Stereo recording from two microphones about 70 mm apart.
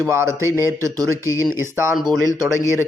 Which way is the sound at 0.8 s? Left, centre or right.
Right.